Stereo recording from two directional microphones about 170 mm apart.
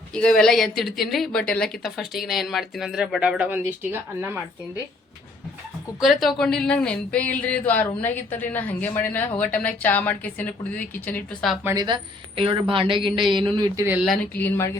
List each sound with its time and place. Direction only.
0.1 s speech: 5° left (ahead or behind); by 4.4 s 15° right (ahead or behind)
6.0 s speech: centre (ahead or behind)
11.6 s speech: 20° right (ahead or behind)
12.4 s a woman's voice: 30° right (ahead or behind)
14.3 s speech: 10° left (ahead or behind)